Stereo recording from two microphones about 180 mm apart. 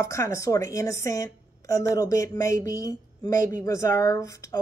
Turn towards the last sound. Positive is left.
turn(degrees=15)  # may be behind; listen again after turning